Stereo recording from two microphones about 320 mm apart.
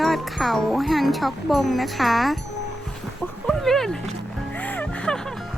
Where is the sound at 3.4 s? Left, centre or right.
Centre.